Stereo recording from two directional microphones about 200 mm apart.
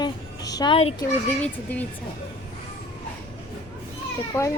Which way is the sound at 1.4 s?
5° left (ahead or behind).